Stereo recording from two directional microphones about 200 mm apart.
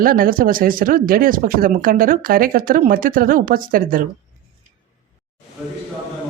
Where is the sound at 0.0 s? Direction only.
45° right (ahead or behind).